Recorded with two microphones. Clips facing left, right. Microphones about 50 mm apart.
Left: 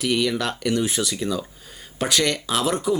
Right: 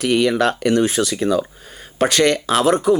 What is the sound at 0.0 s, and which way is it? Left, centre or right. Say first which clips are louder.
Speech: right 6 dB; right.